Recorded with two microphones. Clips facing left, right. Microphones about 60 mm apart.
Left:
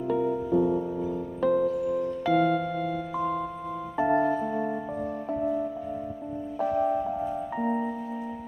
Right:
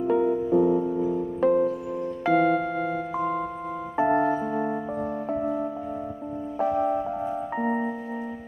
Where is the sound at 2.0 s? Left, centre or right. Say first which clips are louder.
Left 2 dB; centre.